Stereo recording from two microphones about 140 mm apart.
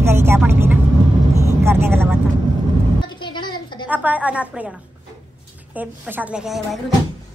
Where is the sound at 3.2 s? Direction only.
35° left (ahead or behind).